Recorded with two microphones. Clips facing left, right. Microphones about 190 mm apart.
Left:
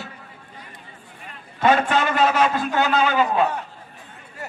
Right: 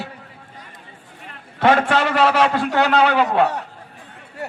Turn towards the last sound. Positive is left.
turn(degrees=-70)  # may be behind; listen again after turning